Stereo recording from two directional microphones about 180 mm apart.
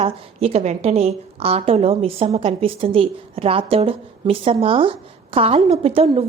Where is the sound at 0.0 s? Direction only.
35° right (ahead or behind).